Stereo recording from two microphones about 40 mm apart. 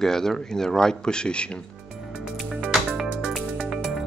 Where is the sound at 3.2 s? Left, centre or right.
Centre.